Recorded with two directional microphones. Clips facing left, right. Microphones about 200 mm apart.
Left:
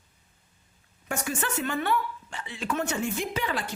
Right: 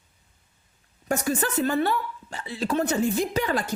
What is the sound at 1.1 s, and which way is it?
A woman's voice, 40° right (ahead or behind).